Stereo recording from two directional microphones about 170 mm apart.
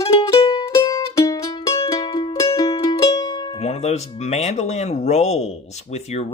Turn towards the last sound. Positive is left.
turn(degrees=40)  # may be behind; listen again after turning